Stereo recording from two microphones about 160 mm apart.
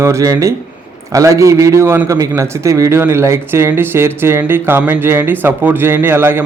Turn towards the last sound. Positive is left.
turn(degrees=-15)  # may be behind; listen again after turning